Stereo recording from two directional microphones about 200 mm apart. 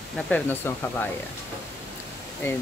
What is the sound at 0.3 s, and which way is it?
Speech, 10° left (ahead or behind).